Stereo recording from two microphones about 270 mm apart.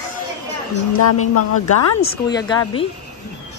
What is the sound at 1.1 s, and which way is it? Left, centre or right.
Speech, left.